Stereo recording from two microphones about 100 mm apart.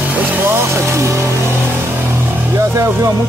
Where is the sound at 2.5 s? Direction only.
30° right (ahead or behind).